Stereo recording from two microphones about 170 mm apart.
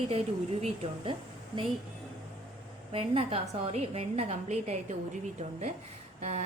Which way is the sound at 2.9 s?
35° right (ahead or behind).